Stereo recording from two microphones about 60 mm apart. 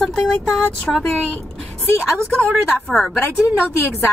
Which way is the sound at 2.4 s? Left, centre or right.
Centre.